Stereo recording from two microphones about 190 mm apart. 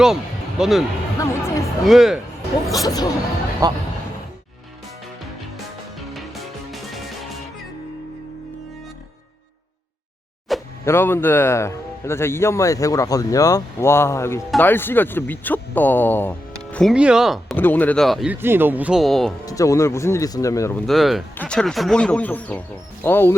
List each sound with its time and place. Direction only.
0.6 s speech: centre (ahead or behind)
1.2 s speech: 15° left (ahead or behind)
1.9 s speech: centre (ahead or behind)
2.8 s speech: 20° left (ahead or behind)
3.6 s speech: 20° right (ahead or behind)
6.1 s music: centre (ahead or behind)
10.5 s a sound: centre (ahead or behind)
10.8 s speech: 10° left (ahead or behind)
17.6 s speech: 10° left (ahead or behind)
18.3 s speech: 10° right (ahead or behind)
19.5 s speech: 15° left (ahead or behind)
20.8 s speech: centre (ahead or behind)